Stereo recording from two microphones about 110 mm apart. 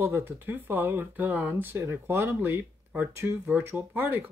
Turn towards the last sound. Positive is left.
turn(degrees=-15)  # may be behind; listen again after turning